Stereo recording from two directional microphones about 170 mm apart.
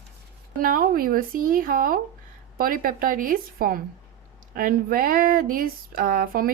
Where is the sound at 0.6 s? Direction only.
55° right (ahead or behind).